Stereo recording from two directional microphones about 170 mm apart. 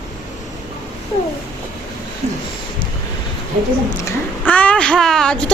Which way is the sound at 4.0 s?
15° left (ahead or behind).